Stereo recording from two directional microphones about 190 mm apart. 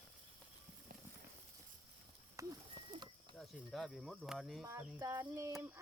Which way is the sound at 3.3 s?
Centre (ahead or behind).